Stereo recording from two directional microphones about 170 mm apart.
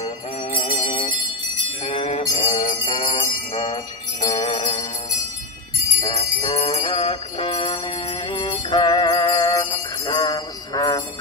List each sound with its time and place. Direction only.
0.0 s music: 35° left (ahead or behind)
1.6 s jingle bell: 35° left (ahead or behind)
6.0 s jingle bell: 35° left (ahead or behind)